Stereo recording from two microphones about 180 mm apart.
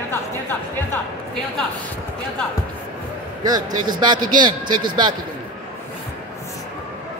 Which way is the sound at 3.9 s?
25° right (ahead or behind).